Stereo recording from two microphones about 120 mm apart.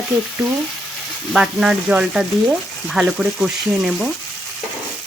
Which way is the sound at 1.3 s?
5° right (ahead or behind).